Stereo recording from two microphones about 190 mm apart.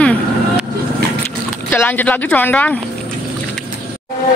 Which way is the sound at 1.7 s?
10° left (ahead or behind).